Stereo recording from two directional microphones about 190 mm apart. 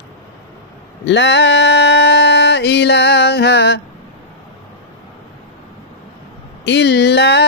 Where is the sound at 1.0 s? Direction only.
70° left (ahead or behind).